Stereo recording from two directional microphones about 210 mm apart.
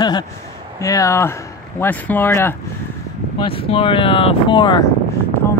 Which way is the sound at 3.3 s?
25° left (ahead or behind).